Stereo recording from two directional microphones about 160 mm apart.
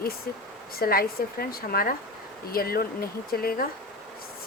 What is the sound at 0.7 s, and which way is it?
Speech, 70° left (ahead or behind).